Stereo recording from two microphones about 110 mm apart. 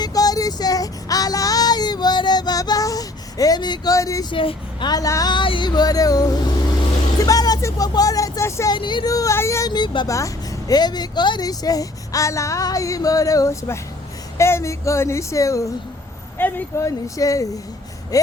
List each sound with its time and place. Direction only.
0.0 s child singing: 35° left (ahead or behind)
4.3 s speech: 50° left (ahead or behind); by 5.3 s 30° left (ahead or behind)
5.3 s speech: 45° left (ahead or behind)
7.2 s vehicle: 35° left (ahead or behind)
8.7 s speech: 45° left (ahead or behind)
9.0 s speech: 30° left (ahead or behind)
9.7 s speech: 45° left (ahead or behind)
10.1 s speech: 30° left (ahead or behind)
16.4 s speech: 20° left (ahead or behind)